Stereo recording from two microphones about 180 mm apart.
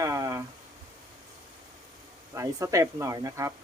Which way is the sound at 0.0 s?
15° right (ahead or behind).